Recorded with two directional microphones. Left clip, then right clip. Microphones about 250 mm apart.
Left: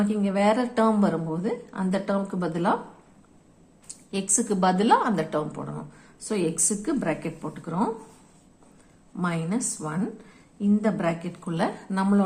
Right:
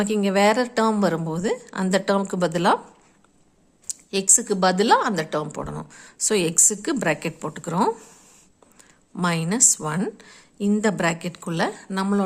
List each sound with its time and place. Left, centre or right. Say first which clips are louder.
0.0 s a woman's voice: right 5 dB; right
4.1 s a woman's voice: right 5 dB; right
9.1 s a woman's voice: right 5 dB; right